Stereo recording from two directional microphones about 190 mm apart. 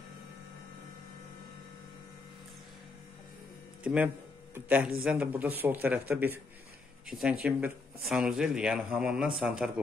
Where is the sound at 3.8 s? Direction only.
10° right (ahead or behind).